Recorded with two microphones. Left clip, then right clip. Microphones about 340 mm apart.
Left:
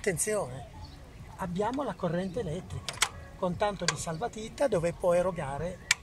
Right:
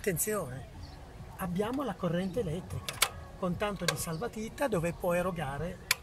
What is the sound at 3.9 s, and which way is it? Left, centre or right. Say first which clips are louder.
Speech: left 2 dB; centre.